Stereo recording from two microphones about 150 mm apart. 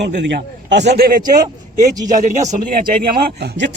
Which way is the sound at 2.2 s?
55° right (ahead or behind).